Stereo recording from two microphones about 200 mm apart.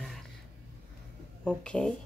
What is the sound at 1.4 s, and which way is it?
Speech, 5° left (ahead or behind).